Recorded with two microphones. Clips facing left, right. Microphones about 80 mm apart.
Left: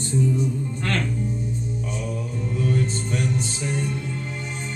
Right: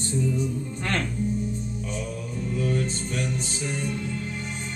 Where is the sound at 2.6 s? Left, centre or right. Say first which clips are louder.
Left 3 dB; left.